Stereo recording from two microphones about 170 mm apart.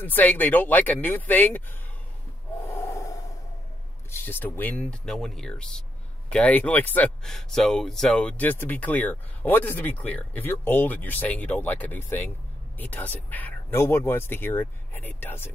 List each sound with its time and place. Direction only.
0.0 s speech: 10° left (ahead or behind)
2.6 s gasp: 15° left (ahead or behind)
4.1 s speech: 10° left (ahead or behind)